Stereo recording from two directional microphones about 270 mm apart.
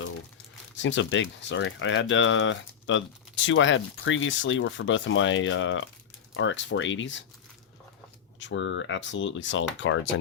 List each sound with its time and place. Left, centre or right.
0.8 s speech: left
8.4 s speech: left